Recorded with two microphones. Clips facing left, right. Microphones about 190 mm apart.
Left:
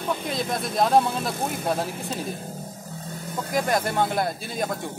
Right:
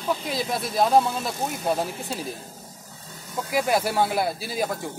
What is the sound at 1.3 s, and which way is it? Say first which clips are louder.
Speech: left 1 dB; 55° left (ahead or behind).